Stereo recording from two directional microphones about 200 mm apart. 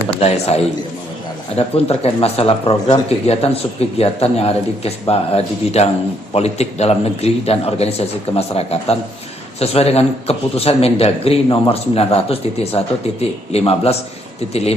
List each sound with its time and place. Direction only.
0.2 s a man's voice: 30° left (ahead or behind)